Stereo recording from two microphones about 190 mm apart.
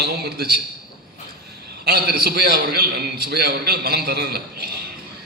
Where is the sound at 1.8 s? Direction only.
55° right (ahead or behind).